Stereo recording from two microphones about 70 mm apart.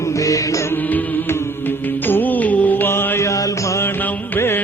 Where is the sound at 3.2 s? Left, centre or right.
Left.